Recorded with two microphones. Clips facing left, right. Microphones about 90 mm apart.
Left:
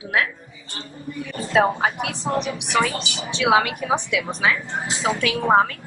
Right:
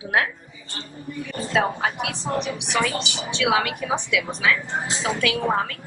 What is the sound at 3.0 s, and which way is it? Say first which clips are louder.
Speech: right 1 dB; 20° right (ahead or behind).